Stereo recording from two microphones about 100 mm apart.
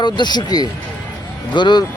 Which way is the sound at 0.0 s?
45° left (ahead or behind).